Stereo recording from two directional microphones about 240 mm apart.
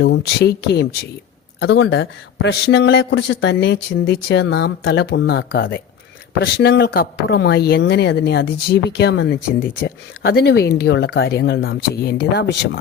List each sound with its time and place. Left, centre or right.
0.0 s speech: left